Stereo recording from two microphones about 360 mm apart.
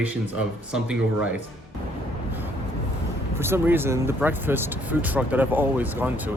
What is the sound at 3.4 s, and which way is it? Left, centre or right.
Speech, centre.